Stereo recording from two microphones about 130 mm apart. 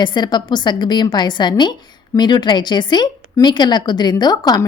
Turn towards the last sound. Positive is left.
turn(degrees=30)  # may be behind; listen again after turning